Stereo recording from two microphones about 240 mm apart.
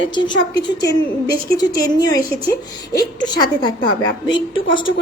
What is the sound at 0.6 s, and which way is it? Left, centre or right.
A woman's voice, centre.